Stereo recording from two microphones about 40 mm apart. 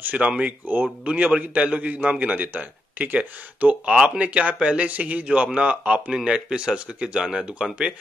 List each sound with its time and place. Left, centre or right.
0.0 s a man's voice: right
3.9 s speech: centre
4.2 s a man's voice: right
6.1 s speech: right